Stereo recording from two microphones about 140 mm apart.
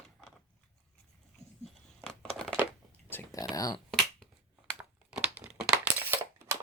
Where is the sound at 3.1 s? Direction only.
15° left (ahead or behind).